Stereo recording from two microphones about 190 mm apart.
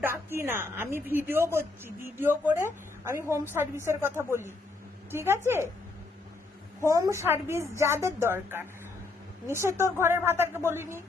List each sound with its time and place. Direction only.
0.0 s a woman's voice: 10° right (ahead or behind)
5.1 s a woman's voice: 15° right (ahead or behind)
6.8 s a woman's voice: 15° right (ahead or behind)